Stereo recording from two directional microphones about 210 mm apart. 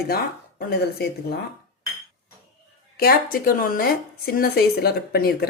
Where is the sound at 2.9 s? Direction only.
45° left (ahead or behind).